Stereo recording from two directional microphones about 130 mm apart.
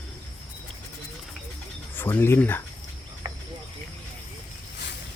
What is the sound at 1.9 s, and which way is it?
Speech, 15° left (ahead or behind).